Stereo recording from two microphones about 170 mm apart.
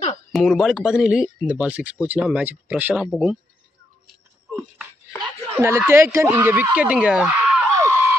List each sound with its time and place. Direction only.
0.3 s speech: centre (ahead or behind)
5.6 s speech: 15° right (ahead or behind)
7.8 s a sound: 15° right (ahead or behind)